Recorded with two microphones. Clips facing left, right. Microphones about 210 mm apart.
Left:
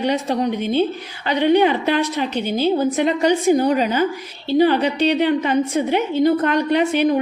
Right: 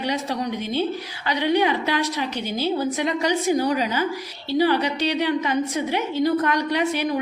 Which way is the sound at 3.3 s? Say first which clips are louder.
Left 5 dB; 50° left (ahead or behind).